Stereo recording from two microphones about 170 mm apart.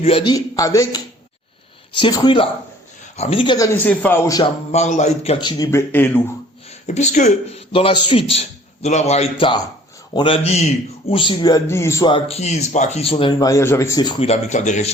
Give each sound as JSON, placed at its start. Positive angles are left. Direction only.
{"t": 0.0, "sound": "a man's voice", "side_deg": 30}
{"t": 3.8, "sound": "a man's voice", "side_deg": 10}
{"t": 4.7, "sound": "a man's voice", "side_deg": 40}
{"t": 5.9, "sound": "a man's voice", "side_deg": 10}
{"t": 6.8, "sound": "a man's voice", "side_deg": 45}
{"t": 12.0, "sound": "a man's voice", "side_deg": 35}
{"t": 13.4, "sound": "a man's voice", "side_deg": 15}